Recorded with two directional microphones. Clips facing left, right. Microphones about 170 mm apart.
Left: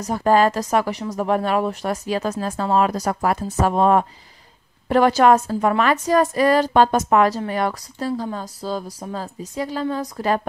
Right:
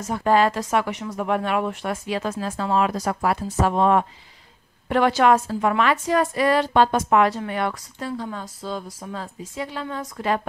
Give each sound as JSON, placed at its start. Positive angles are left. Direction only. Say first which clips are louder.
{"t": 0.0, "sound": "a woman's voice", "louder": "left 2 dB", "side_deg": 40}